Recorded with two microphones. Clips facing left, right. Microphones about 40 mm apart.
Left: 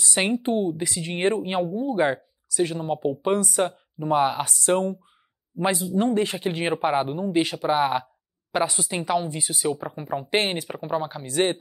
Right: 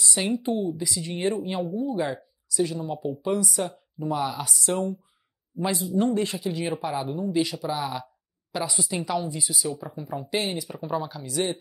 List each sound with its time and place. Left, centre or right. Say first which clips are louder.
0.0 s speech: left 3 dB; left
10.8 s speech: left 1 dB; left